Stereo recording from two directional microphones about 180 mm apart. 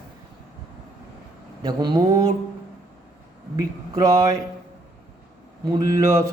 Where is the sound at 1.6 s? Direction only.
25° right (ahead or behind).